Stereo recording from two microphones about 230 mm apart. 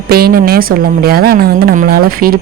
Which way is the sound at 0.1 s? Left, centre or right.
Right.